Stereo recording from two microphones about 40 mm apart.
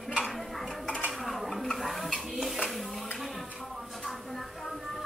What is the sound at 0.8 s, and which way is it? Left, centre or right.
Dishes, left.